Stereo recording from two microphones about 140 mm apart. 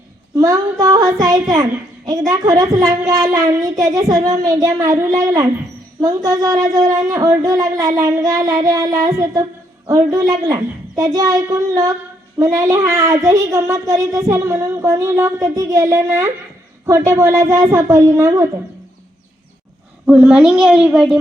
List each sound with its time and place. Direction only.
0.3 s speech: 25° right (ahead or behind)
20.1 s a woman's voice: 5° right (ahead or behind)